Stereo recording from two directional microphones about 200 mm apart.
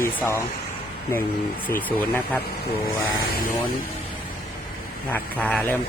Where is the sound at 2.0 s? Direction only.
10° left (ahead or behind).